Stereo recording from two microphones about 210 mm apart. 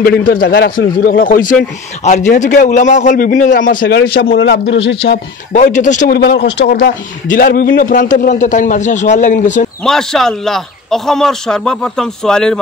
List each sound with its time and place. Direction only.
0.0 s a man's voice: 45° left (ahead or behind)
4.4 s a man's voice: 60° left (ahead or behind)
5.5 s a man's voice: 35° left (ahead or behind)
9.8 s a man's voice: centre (ahead or behind)